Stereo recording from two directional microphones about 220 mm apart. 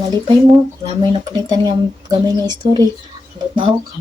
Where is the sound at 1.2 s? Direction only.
20° right (ahead or behind).